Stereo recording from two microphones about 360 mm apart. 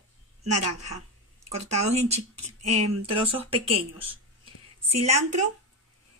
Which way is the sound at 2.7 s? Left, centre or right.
Right.